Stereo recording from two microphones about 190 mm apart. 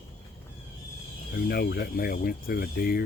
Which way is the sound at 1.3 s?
55° left (ahead or behind).